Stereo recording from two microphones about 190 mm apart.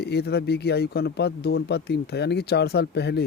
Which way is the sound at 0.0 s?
60° left (ahead or behind).